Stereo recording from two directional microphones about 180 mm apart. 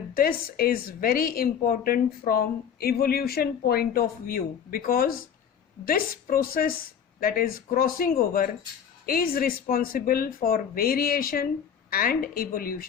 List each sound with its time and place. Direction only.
0.2 s a woman's voice: 55° left (ahead or behind)